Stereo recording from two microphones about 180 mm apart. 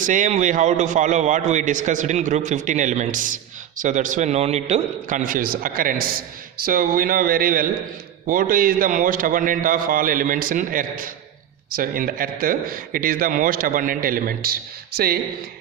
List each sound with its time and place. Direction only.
0.0 s a man's voice: 45° right (ahead or behind)